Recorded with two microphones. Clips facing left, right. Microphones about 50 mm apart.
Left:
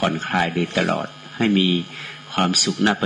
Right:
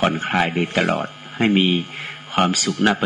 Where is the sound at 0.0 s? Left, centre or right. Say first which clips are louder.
Right 2 dB; right.